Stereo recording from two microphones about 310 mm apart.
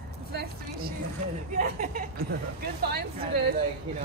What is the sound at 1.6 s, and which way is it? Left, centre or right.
Speech, right.